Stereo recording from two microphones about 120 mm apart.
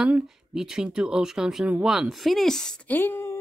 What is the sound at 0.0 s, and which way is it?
Speech, 5° right (ahead or behind).